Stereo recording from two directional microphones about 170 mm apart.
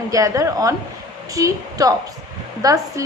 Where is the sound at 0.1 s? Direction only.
20° right (ahead or behind).